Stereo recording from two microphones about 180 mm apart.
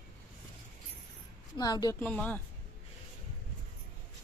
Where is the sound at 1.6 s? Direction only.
20° left (ahead or behind).